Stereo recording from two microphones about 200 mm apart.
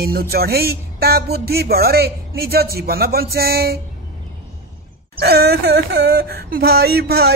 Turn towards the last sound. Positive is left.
turn(degrees=-55)  # may be behind; listen again after turning